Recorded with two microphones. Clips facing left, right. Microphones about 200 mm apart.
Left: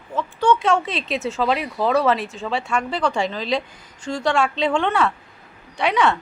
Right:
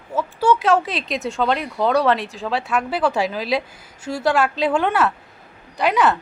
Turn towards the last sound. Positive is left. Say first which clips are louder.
# right 1 dB
turn(degrees=0)  # may be behind; listen again after turning